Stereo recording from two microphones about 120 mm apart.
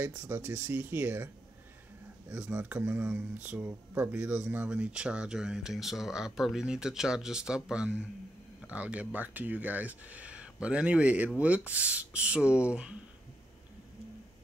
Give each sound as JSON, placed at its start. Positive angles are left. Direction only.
{"t": 0.1, "sound": "speech", "side_deg": -15}